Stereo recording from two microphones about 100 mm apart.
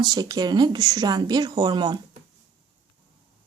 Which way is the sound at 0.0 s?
40° right (ahead or behind).